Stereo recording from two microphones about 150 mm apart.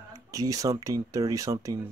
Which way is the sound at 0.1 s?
25° right (ahead or behind).